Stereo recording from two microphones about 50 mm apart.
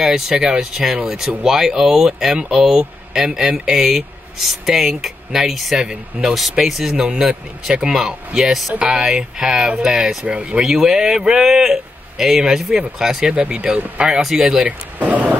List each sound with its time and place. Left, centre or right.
0.0 s speech: centre
10.6 s speech: centre
13.3 s speech: right
14.6 s speech: right